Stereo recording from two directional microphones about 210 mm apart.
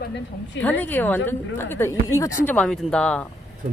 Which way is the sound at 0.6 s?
5° left (ahead or behind).